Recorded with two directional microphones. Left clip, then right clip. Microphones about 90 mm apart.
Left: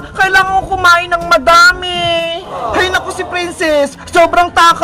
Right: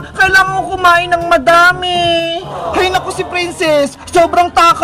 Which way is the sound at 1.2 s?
25° left (ahead or behind).